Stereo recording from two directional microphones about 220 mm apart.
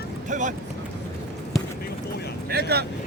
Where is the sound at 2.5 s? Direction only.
45° right (ahead or behind).